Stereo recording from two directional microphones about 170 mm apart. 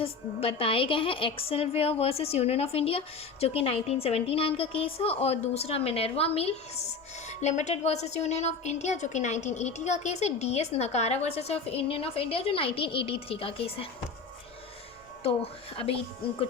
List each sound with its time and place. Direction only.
0.0 s a woman's voice: 35° left (ahead or behind)